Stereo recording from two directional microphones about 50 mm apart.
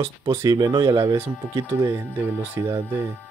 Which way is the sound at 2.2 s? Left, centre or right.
Right.